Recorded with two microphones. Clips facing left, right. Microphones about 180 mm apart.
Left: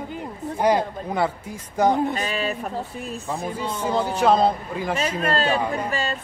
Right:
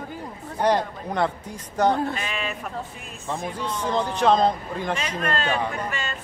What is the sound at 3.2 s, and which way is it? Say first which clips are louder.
Speech: even; 5° left (ahead or behind).